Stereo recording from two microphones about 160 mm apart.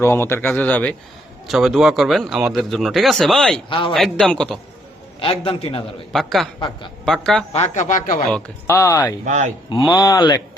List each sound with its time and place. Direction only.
0.0 s speech: 15° left (ahead or behind)
1.5 s speech: centre (ahead or behind)
3.7 s a man's voice: 30° left (ahead or behind)
3.9 s speech: centre (ahead or behind)
5.2 s a man's voice: 35° left (ahead or behind)
6.1 s speech: centre (ahead or behind)
7.5 s speech: 45° left (ahead or behind)
8.6 s speech: 20° left (ahead or behind)
9.2 s speech: 50° right (ahead or behind)
9.9 s speech: 25° left (ahead or behind)